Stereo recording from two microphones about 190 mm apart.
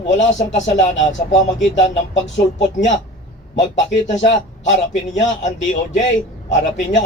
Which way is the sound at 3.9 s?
35° left (ahead or behind).